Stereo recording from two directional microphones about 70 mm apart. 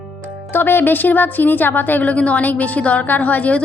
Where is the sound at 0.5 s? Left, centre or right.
Left.